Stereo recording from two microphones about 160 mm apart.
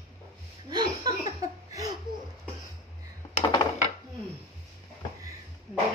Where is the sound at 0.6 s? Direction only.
25° right (ahead or behind).